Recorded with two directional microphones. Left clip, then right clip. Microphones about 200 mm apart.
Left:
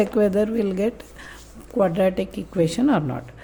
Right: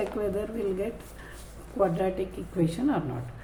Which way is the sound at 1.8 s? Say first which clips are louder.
Left 6 dB; 55° left (ahead or behind).